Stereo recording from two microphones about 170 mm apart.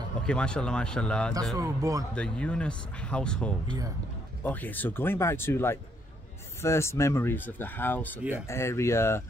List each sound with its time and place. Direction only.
0.3 s speech: 5° left (ahead or behind)
1.6 s speech: 20° right (ahead or behind)
2.1 s speech: 5° left (ahead or behind)
8.2 s speech: 5° right (ahead or behind)
8.5 s speech: 15° left (ahead or behind)